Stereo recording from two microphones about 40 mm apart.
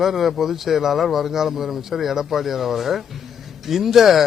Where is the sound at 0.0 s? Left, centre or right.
Centre.